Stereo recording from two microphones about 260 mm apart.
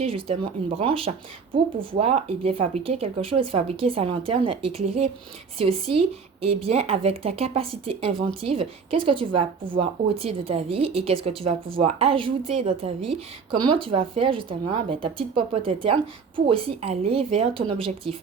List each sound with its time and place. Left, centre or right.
0.0 s a woman's voice: right